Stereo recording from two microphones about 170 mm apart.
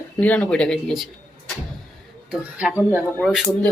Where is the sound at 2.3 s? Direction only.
5° right (ahead or behind).